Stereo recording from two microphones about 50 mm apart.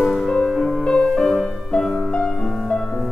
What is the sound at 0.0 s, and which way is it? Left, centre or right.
Music, centre.